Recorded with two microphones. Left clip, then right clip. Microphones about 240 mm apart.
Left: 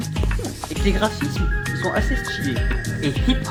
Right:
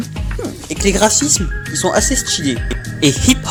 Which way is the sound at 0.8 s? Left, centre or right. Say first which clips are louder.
Right 10 dB; right.